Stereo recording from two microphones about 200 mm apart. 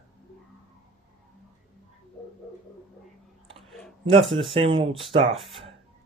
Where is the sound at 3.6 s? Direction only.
Centre (ahead or behind).